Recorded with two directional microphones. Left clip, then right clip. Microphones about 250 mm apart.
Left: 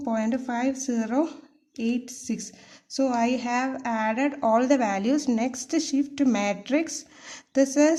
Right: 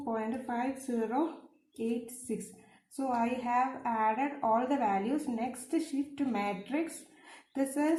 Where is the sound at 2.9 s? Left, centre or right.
Left.